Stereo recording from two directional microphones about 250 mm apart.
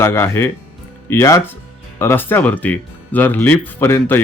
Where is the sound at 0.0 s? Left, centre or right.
Centre.